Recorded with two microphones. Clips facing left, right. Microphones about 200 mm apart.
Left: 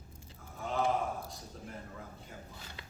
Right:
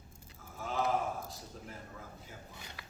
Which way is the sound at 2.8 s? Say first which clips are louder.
Left 2 dB; 25° left (ahead or behind).